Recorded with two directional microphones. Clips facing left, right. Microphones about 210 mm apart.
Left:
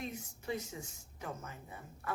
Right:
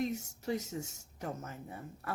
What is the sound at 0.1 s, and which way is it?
A woman's voice, 45° right (ahead or behind).